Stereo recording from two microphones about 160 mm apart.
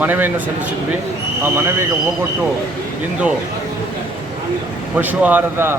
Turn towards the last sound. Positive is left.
turn(degrees=-15)  # may be behind; listen again after turning